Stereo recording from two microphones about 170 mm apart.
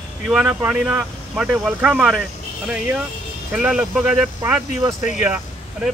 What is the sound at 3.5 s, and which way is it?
Speech, 5° right (ahead or behind).